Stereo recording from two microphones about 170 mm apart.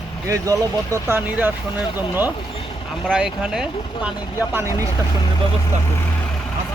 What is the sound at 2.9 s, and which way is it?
Speech, centre (ahead or behind).